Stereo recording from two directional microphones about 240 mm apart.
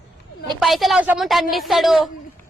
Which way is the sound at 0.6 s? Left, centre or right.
Centre.